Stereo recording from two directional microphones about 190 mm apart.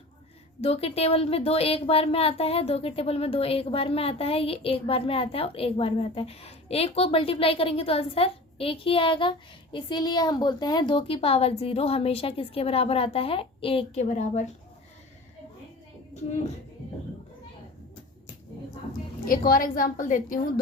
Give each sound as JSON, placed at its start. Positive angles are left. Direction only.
{"t": 0.6, "sound": "a woman's voice", "side_deg": 30}
{"t": 16.1, "sound": "music", "side_deg": 35}
{"t": 19.2, "sound": "a woman's voice", "side_deg": 50}